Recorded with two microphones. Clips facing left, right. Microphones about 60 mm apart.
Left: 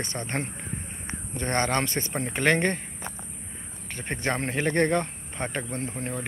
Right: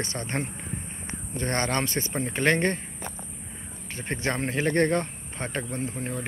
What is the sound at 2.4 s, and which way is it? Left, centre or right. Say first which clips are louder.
Speech: even; left.